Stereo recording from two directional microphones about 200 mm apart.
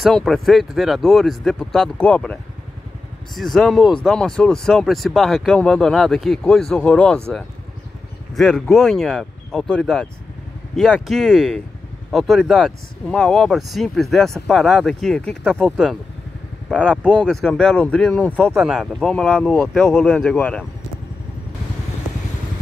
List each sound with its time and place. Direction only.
0.0 s speech: centre (ahead or behind)
3.3 s speech: centre (ahead or behind)
8.4 s speech: 5° left (ahead or behind)